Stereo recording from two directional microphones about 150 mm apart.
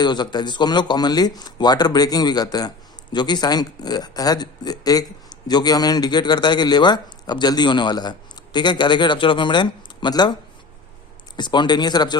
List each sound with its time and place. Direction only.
0.0 s speech: 30° left (ahead or behind)
11.3 s speech: 30° left (ahead or behind)